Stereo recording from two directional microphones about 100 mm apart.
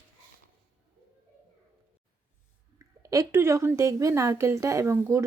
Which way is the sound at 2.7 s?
35° right (ahead or behind).